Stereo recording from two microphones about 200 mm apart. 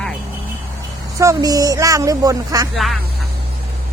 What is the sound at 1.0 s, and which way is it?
Speech, 15° right (ahead or behind).